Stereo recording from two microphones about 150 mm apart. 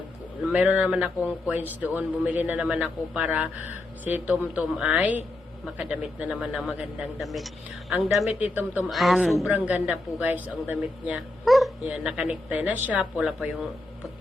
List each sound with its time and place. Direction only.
0.5 s speech: 10° right (ahead or behind)
8.9 s speech: centre (ahead or behind)